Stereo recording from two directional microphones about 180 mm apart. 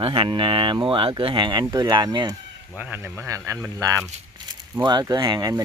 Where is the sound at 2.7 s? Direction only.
10° right (ahead or behind).